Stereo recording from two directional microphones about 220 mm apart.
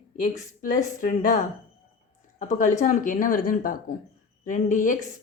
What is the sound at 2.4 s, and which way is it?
Speech, 35° left (ahead or behind).